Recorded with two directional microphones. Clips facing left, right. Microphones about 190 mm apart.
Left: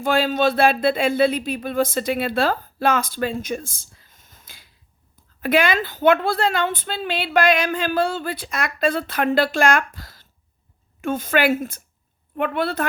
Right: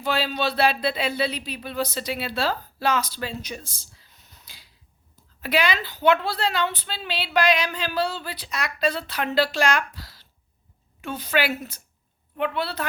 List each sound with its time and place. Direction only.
0.0 s a woman's voice: 50° left (ahead or behind)